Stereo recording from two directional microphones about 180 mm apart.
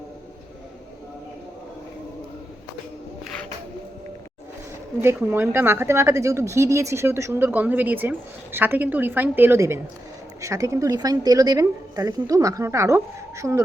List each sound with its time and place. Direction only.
5.0 s a woman's voice: 15° right (ahead or behind)